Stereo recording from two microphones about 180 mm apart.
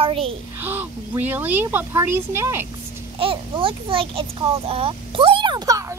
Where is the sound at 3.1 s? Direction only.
30° right (ahead or behind).